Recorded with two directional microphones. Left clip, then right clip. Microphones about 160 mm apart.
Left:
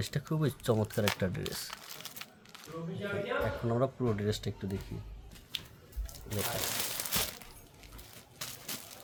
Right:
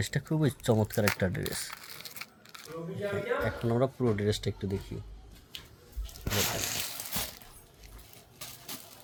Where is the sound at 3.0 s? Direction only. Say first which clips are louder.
Right 3 dB; 20° right (ahead or behind).